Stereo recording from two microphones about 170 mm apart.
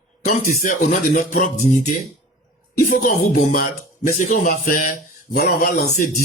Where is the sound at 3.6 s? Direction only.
50° left (ahead or behind).